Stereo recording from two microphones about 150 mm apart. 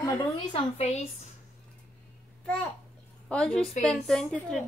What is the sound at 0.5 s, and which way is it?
Speech, 45° left (ahead or behind).